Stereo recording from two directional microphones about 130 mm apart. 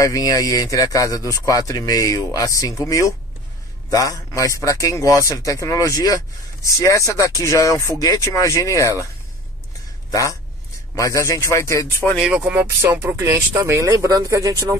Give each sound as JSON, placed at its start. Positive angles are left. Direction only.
{"t": 0.0, "sound": "speech", "side_deg": 25}
{"t": 11.0, "sound": "speech", "side_deg": 25}
{"t": 12.2, "sound": "speech", "side_deg": -10}